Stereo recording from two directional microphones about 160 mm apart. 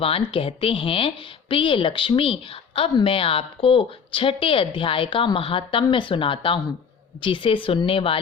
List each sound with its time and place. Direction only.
0.0 s speech: 35° left (ahead or behind)